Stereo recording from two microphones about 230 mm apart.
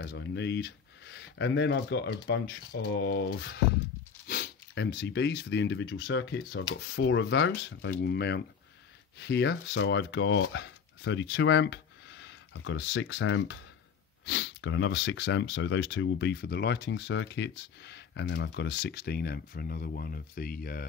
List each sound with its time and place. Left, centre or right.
0.0 s speech: left